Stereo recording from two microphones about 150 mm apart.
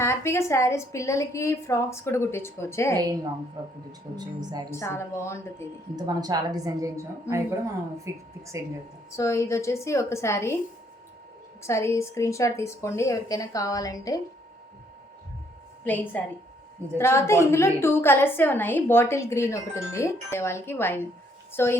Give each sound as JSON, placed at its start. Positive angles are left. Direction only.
{"t": 0.0, "sound": "a woman's voice", "side_deg": 15}
{"t": 3.6, "sound": "a woman's voice", "side_deg": -30}
{"t": 4.7, "sound": "a woman's voice", "side_deg": 15}
{"t": 6.0, "sound": "a woman's voice", "side_deg": -25}
{"t": 9.1, "sound": "a woman's voice", "side_deg": 20}
{"t": 11.6, "sound": "a woman's voice", "side_deg": 20}
{"t": 15.8, "sound": "a woman's voice", "side_deg": 10}